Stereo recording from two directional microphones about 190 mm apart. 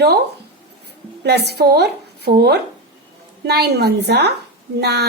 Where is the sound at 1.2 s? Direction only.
60° right (ahead or behind).